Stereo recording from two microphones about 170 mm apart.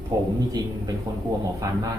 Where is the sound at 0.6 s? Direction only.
25° right (ahead or behind).